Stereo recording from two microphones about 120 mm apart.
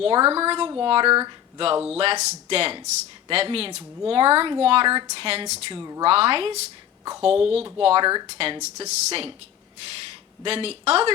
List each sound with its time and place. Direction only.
0.0 s speech: 50° right (ahead or behind)
8.0 s speech: 35° right (ahead or behind)
8.6 s speech: 60° right (ahead or behind)
10.4 s speech: 55° right (ahead or behind)